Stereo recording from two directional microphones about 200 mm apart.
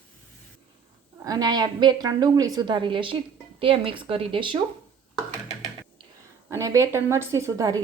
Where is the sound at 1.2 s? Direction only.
20° right (ahead or behind).